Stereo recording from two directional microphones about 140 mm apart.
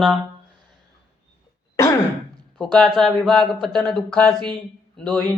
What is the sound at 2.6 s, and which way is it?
A man's voice, 5° left (ahead or behind).